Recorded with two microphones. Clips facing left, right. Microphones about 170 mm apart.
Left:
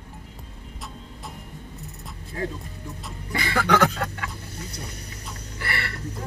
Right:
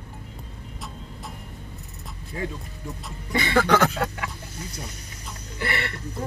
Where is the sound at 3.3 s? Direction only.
20° right (ahead or behind).